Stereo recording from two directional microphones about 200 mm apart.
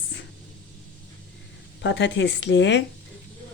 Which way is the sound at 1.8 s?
65° left (ahead or behind).